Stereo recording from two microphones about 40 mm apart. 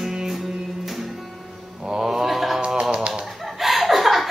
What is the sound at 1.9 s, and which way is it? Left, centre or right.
Mantra, centre.